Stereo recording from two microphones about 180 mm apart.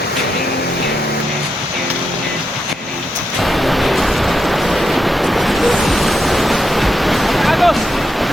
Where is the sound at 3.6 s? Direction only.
Centre (ahead or behind).